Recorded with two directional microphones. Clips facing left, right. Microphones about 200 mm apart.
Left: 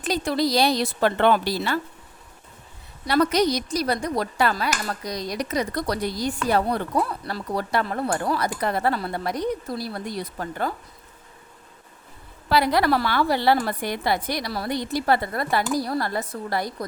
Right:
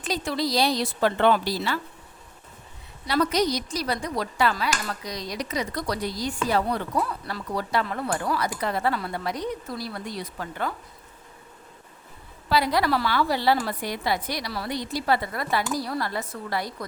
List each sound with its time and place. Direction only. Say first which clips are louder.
0.0 s a woman's voice: left 4 dB; 60° left (ahead or behind)
3.1 s a woman's voice: left 3 dB; 55° left (ahead or behind)
6.9 s speech: left 3 dB; 35° left (ahead or behind)
7.5 s a woman's voice: left 2 dB; 55° left (ahead or behind)
7.9 s speech: left 3 dB; 40° left (ahead or behind)
9.0 s a woman's voice: left 3 dB; 40° left (ahead or behind)
12.5 s a woman's voice: left 3 dB; 60° left (ahead or behind)